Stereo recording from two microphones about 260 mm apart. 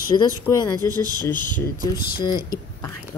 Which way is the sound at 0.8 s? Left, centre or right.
Centre.